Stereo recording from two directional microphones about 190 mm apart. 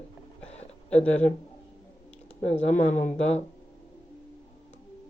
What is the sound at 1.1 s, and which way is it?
Speech, 35° left (ahead or behind).